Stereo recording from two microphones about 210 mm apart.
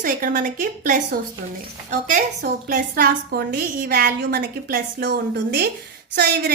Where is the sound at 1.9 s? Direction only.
40° right (ahead or behind).